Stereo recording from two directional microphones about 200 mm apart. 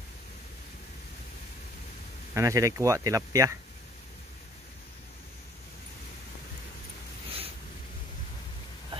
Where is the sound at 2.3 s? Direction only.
15° right (ahead or behind).